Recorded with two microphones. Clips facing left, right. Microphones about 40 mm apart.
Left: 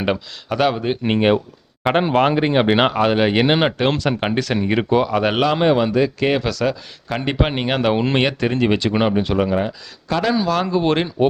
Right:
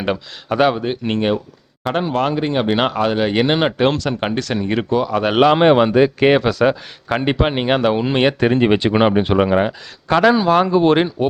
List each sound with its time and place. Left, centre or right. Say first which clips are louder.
0.4 s speech: right 3 dB; centre
0.9 s speech: left 2 dB; centre
1.8 s speech: left 3 dB; left; by 5.4 s centre
5.4 s speech: right 7 dB; right
6.4 s speech: right 5 dB; centre
7.8 s speech: left 2 dB; centre
8.3 s speech: right 4 dB; centre
9.5 s speech: right 4 dB; right
10.3 s speech: right 5 dB; right
10.8 s speech: right 4 dB; centre